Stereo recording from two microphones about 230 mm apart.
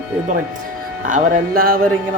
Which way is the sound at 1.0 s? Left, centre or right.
Right.